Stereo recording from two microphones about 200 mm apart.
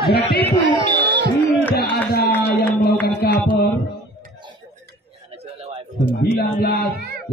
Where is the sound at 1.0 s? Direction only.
55° right (ahead or behind).